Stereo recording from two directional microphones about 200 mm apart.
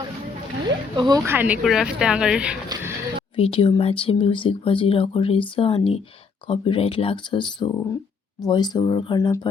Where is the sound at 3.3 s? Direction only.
30° left (ahead or behind).